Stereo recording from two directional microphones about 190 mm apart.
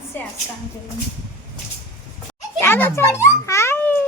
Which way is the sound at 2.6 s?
10° left (ahead or behind).